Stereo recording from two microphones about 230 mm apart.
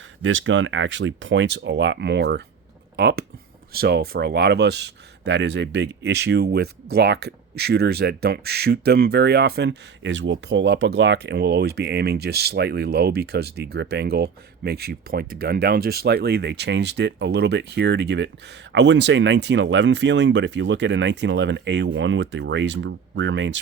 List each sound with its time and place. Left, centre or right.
0.2 s speech: right